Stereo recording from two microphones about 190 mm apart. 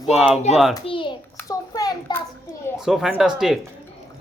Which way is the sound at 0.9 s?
25° left (ahead or behind).